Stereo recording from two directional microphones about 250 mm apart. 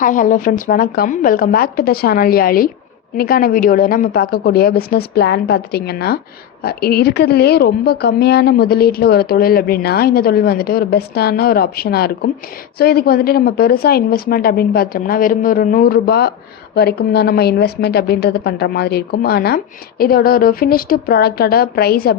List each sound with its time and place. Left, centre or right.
0.0 s a woman's voice: left